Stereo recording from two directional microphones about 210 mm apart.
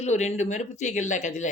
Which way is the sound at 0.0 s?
35° left (ahead or behind).